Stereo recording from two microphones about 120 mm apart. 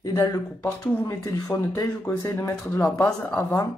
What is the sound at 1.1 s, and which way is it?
Speech, 30° left (ahead or behind).